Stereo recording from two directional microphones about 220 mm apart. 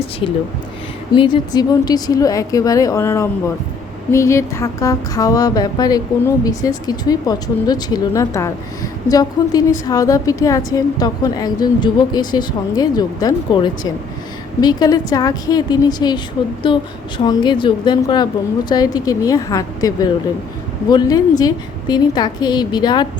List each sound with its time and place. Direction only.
1.1 s a woman's voice: 20° left (ahead or behind)
17.2 s a woman's voice: 20° left (ahead or behind)